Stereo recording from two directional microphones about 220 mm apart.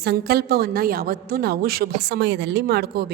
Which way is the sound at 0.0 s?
45° right (ahead or behind).